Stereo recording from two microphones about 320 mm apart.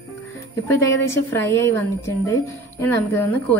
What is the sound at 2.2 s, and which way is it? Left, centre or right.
Speech, centre.